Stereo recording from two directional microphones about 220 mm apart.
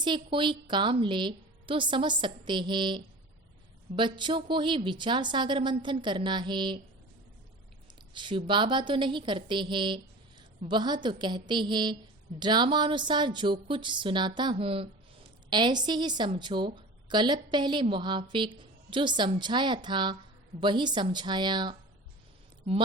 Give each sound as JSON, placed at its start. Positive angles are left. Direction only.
{"t": 0.0, "sound": "a woman's voice", "side_deg": -20}
{"t": 8.1, "sound": "a woman's voice", "side_deg": -20}